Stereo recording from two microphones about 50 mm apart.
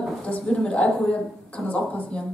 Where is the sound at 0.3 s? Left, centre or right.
Left.